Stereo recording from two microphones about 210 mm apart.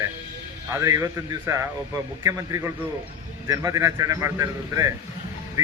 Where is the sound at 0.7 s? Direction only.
15° right (ahead or behind).